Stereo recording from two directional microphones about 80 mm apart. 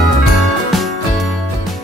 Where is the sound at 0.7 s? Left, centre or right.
Centre.